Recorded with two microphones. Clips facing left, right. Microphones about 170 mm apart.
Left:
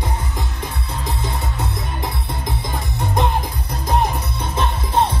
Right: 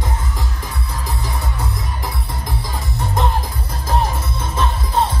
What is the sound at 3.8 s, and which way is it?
Music, 20° left (ahead or behind).